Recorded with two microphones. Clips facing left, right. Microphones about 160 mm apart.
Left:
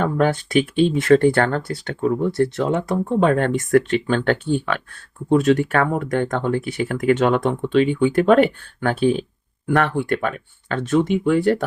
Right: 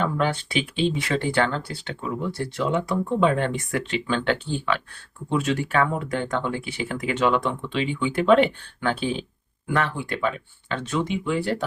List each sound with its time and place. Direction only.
0.0 s speech: 45° left (ahead or behind)